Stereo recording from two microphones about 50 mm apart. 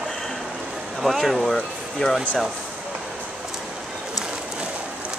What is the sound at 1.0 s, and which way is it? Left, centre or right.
Speech, centre.